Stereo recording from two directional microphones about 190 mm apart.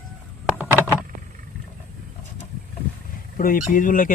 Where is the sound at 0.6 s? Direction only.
10° right (ahead or behind).